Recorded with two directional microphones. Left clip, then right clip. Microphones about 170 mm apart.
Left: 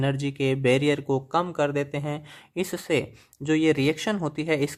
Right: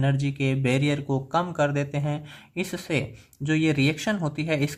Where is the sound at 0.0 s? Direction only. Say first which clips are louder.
Left 1 dB; 45° left (ahead or behind).